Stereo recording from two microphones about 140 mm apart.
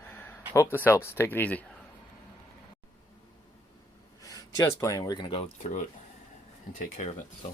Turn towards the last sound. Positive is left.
turn(degrees=50)  # may be behind; listen again after turning